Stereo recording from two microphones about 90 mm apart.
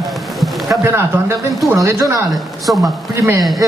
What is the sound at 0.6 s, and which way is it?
A man's voice, 30° right (ahead or behind).